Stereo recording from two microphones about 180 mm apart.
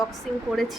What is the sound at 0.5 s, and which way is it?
Speech, centre (ahead or behind).